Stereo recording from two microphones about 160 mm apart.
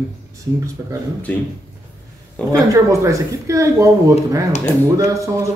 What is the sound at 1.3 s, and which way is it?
Speech, 10° left (ahead or behind).